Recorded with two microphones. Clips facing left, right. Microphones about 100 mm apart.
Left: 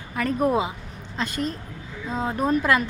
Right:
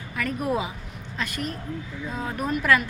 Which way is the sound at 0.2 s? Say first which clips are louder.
Left 4 dB; 35° left (ahead or behind).